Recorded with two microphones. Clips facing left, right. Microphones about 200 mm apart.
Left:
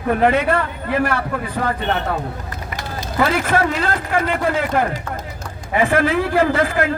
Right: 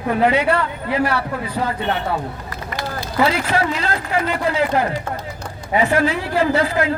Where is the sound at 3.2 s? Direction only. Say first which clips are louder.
Left 1 dB; 50° left (ahead or behind).